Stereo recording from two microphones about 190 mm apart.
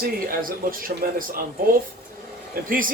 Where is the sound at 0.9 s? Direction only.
40° right (ahead or behind).